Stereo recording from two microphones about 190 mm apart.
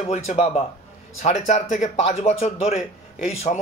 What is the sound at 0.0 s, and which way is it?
Speech, 35° left (ahead or behind).